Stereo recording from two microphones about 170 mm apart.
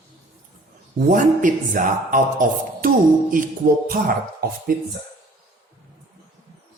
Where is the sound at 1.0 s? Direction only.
50° right (ahead or behind).